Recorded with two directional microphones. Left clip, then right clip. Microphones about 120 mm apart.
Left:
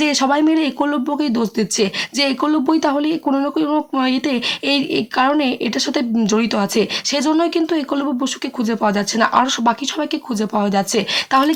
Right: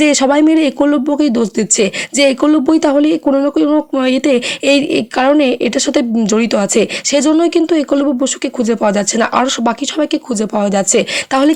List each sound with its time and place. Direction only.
0.0 s speech: 45° right (ahead or behind)
3.2 s speech: 35° right (ahead or behind)
4.0 s speech: 45° right (ahead or behind)